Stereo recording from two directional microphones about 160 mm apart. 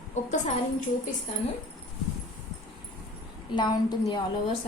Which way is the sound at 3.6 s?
25° left (ahead or behind).